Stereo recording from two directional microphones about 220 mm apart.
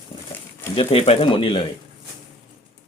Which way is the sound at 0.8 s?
25° left (ahead or behind).